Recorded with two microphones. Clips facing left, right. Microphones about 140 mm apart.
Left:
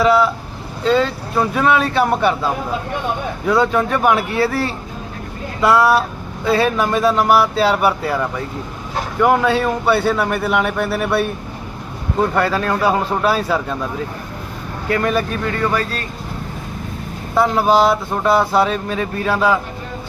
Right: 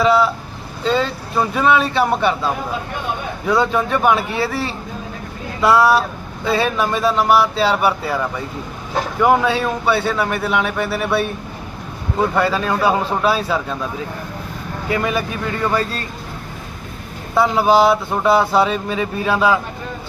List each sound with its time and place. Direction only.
0.0 s speech: centre (ahead or behind)
9.2 s speech: centre (ahead or behind)
12.3 s speech: centre (ahead or behind)
14.8 s speech: 10° right (ahead or behind)
15.5 s speech: 15° right (ahead or behind)
17.3 s speech: 5° right (ahead or behind)